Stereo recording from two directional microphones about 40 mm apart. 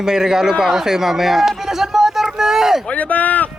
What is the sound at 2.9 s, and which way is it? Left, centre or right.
Speech, left.